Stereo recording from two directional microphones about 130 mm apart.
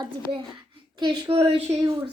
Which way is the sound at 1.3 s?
50° right (ahead or behind).